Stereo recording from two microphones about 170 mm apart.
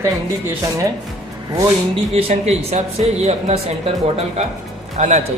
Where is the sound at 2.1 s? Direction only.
35° right (ahead or behind).